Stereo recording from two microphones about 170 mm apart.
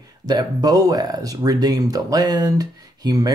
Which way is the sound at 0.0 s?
25° right (ahead or behind).